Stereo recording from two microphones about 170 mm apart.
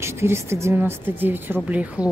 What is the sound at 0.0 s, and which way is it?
Speech, 15° right (ahead or behind).